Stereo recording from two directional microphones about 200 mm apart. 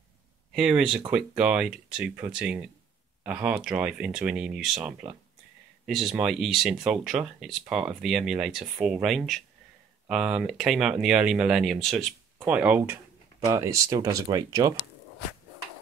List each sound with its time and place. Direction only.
0.6 s speech: 5° right (ahead or behind)